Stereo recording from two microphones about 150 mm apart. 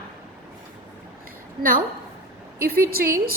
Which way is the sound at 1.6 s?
70° right (ahead or behind).